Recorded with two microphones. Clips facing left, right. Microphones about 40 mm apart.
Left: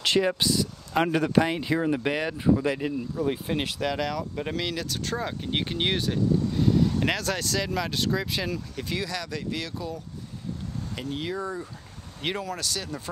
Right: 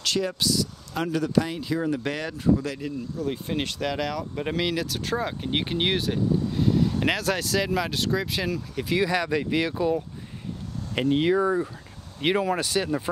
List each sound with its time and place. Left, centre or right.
0.0 s speech: left
1.8 s speech: centre
3.3 s speech: centre
9.0 s speech: right